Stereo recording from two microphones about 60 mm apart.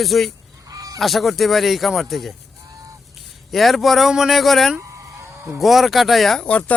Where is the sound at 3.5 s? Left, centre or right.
Centre.